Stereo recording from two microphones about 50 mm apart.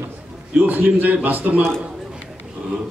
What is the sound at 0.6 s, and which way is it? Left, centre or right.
A man's voice, right.